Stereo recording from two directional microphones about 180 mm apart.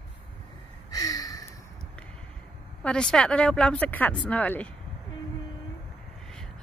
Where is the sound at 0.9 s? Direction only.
20° left (ahead or behind).